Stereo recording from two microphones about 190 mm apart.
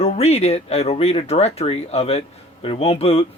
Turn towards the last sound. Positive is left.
turn(degrees=30)  # may be behind; listen again after turning